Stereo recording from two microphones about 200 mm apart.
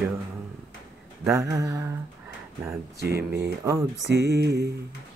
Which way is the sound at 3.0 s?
55° right (ahead or behind).